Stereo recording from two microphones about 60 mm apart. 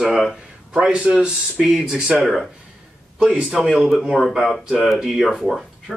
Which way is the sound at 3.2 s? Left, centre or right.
Centre.